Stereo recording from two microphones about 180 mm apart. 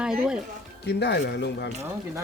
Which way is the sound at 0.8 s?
70° left (ahead or behind).